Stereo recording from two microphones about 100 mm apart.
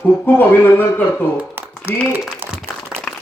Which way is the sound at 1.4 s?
15° right (ahead or behind).